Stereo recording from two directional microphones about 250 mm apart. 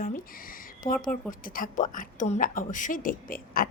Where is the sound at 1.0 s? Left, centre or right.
Left.